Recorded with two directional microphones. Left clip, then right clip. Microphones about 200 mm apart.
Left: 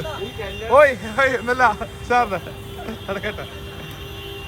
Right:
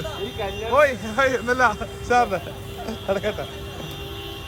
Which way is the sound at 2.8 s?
15° right (ahead or behind).